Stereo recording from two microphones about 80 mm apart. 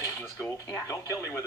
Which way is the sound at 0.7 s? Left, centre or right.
Left.